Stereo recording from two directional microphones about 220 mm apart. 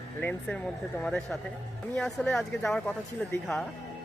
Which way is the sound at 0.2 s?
5° left (ahead or behind).